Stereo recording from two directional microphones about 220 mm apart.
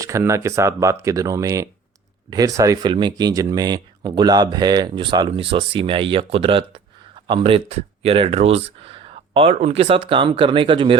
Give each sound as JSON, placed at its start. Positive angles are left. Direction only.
{"t": 0.0, "sound": "speech", "side_deg": -15}